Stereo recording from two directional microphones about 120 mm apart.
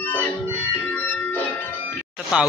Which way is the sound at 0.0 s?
15° left (ahead or behind).